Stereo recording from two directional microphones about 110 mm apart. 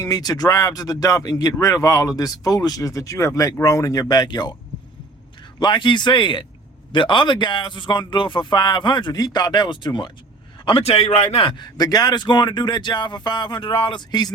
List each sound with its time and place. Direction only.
0.0 s speech: 35° left (ahead or behind)
5.5 s speech: 45° left (ahead or behind)
10.7 s a man's voice: 60° left (ahead or behind)
11.5 s speech: 40° left (ahead or behind)